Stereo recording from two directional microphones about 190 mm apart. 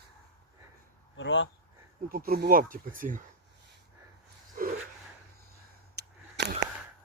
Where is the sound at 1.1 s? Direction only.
80° left.